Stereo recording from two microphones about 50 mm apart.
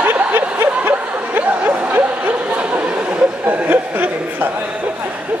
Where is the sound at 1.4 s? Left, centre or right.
Right.